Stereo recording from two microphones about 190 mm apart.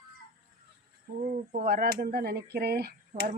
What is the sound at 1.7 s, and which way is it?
Speech, 50° right (ahead or behind).